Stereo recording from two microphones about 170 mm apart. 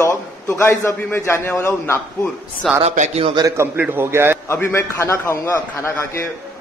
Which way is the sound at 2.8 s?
35° right (ahead or behind).